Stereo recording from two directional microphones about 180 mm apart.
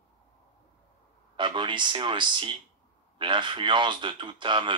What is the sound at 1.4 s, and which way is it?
Speech, 25° right (ahead or behind).